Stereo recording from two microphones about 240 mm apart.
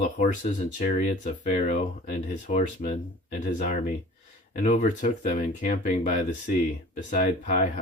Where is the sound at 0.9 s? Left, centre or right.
Left.